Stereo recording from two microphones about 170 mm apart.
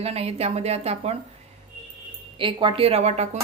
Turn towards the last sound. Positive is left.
turn(degrees=-40)  # may be behind; listen again after turning